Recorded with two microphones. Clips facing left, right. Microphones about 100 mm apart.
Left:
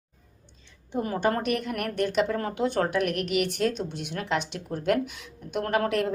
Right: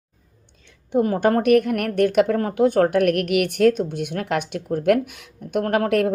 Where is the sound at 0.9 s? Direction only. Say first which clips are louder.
Right 8 dB; 50° right (ahead or behind).